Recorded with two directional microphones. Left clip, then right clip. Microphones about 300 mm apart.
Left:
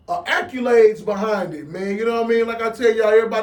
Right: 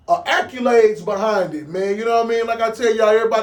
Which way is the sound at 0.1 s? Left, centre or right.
Centre.